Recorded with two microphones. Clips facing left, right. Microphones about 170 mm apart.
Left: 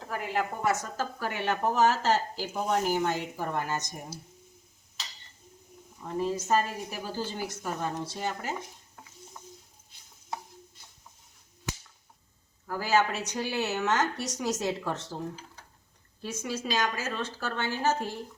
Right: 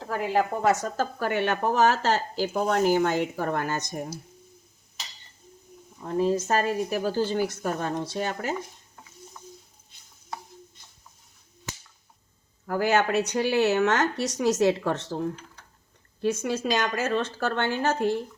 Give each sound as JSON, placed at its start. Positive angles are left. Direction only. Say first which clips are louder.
{"t": 0.6, "sound": "speech", "louder": "right 5 dB", "side_deg": -65}
{"t": 6.1, "sound": "speech", "louder": "right 4 dB", "side_deg": -70}
{"t": 12.6, "sound": "a woman's voice", "louder": "right 3 dB", "side_deg": -60}